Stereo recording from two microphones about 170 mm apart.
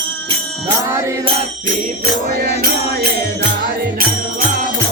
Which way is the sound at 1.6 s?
50° right (ahead or behind).